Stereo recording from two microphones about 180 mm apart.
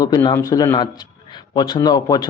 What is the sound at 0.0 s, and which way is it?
Speech, 20° left (ahead or behind).